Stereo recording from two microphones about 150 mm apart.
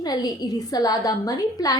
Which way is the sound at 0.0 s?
25° left (ahead or behind).